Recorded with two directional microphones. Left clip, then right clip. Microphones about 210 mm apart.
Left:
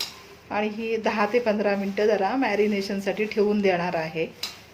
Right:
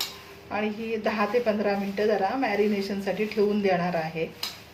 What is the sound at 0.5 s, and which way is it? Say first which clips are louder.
A woman's voice: left 3 dB; 35° left (ahead or behind).